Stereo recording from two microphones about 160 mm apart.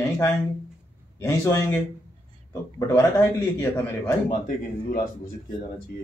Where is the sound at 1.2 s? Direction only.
20° left (ahead or behind).